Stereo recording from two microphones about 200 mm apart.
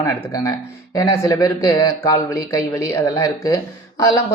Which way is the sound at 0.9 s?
15° left (ahead or behind).